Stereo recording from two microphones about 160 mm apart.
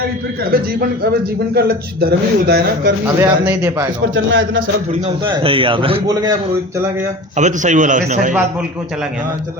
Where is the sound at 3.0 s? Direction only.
15° right (ahead or behind).